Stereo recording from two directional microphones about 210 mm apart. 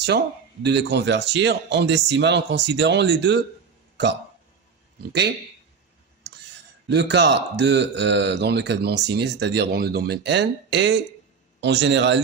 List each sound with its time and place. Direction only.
0.6 s speech: 55° right (ahead or behind)
6.8 s speech: 55° right (ahead or behind)